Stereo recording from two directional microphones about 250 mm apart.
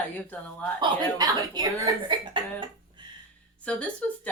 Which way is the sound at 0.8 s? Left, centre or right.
Centre.